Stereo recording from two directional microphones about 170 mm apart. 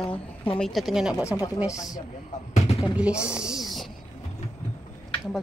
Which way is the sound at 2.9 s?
5° right (ahead or behind).